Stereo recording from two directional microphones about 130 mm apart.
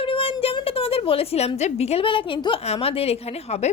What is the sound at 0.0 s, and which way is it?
A woman's voice, 45° left (ahead or behind).